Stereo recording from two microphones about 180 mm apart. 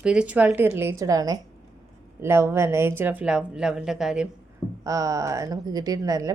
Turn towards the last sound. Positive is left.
turn(degrees=-20)  # may be behind; listen again after turning